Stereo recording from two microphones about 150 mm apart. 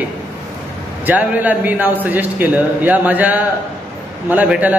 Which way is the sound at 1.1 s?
10° right (ahead or behind).